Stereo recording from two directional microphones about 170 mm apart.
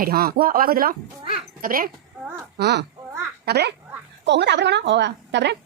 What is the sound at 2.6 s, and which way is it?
A child's voice, 75° right (ahead or behind).